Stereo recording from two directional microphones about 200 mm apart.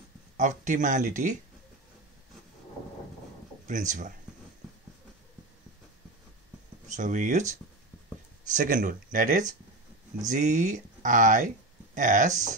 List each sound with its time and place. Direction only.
0.4 s speech: 40° right (ahead or behind)
3.6 s speech: 40° right (ahead or behind)
6.9 s speech: 40° right (ahead or behind)
8.5 s speech: 40° right (ahead or behind)